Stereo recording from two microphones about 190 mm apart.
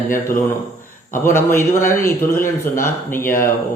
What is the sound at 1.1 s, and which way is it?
A man's voice, 10° left (ahead or behind).